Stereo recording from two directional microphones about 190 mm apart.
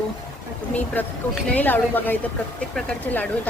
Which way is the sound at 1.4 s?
10° left (ahead or behind).